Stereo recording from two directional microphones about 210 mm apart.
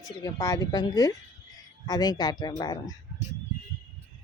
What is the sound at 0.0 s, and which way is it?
Speech, 15° left (ahead or behind).